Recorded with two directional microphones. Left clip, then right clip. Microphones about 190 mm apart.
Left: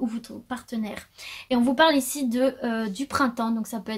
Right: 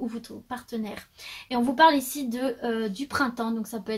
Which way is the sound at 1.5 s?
40° left (ahead or behind).